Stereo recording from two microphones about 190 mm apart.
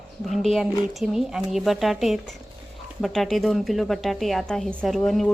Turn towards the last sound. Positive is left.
turn(degrees=0)  # may be behind; listen again after turning